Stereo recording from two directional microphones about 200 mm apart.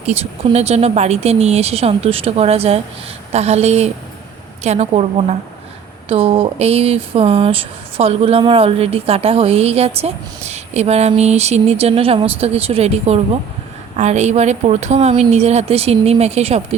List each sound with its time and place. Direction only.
0.0 s speech: 30° right (ahead or behind)